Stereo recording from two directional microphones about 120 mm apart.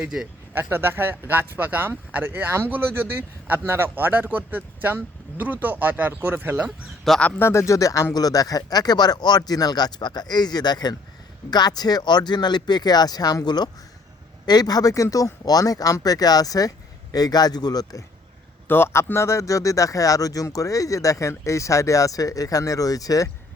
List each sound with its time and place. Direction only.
0.0 s speech: 5° right (ahead or behind)
0.5 s speech: 20° right (ahead or behind)
7.0 s speech: centre (ahead or behind)
7.3 s speech: 20° left (ahead or behind)
18.7 s speech: 20° left (ahead or behind)